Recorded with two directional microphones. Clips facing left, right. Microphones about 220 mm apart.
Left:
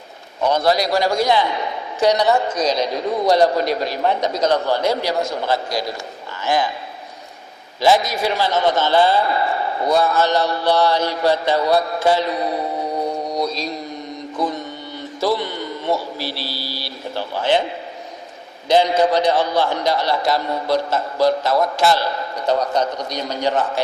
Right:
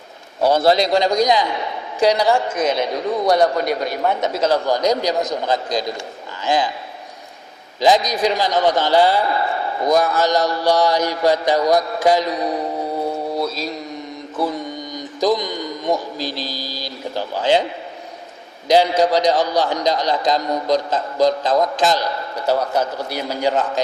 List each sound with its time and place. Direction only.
0.4 s a man's voice: 30° right (ahead or behind)
7.8 s a man's voice: 15° right (ahead or behind)
13.3 s mantra: 5° right (ahead or behind)
16.2 s a man's voice: 15° right (ahead or behind)
18.7 s a man's voice: 10° right (ahead or behind)